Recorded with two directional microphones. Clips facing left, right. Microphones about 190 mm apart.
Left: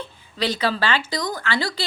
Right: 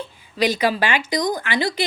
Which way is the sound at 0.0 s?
10° right (ahead or behind).